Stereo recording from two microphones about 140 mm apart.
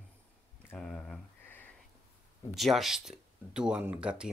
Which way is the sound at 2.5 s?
Centre (ahead or behind).